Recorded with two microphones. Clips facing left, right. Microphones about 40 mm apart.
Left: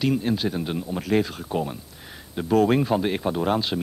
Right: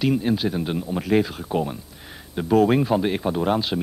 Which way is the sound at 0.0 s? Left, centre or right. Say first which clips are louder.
Right 2 dB; centre.